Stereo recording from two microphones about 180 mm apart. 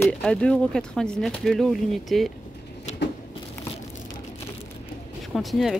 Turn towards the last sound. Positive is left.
turn(degrees=0)  # may be behind; listen again after turning